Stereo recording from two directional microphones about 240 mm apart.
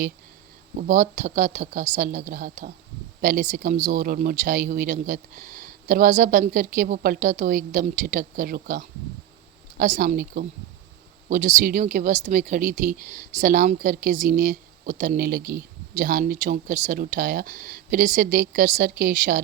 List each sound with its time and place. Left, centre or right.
0.8 s speech: right